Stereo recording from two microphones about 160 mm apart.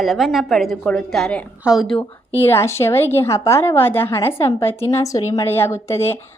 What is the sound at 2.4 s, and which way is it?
A woman's voice, 15° left (ahead or behind).